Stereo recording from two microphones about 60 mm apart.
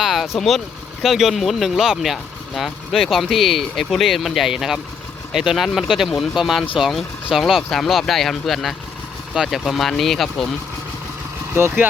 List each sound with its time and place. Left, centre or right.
0.0 s vehicle: centre
0.3 s speech: centre
11.6 s speech: right